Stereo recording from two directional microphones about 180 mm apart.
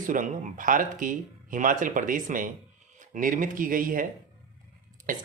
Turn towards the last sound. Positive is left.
turn(degrees=-45)  # may be behind; listen again after turning